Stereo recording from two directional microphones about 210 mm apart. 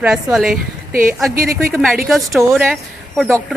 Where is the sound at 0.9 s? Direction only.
45° right (ahead or behind).